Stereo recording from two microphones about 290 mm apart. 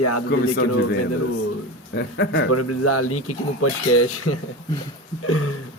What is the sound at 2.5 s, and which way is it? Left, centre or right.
Speech, left.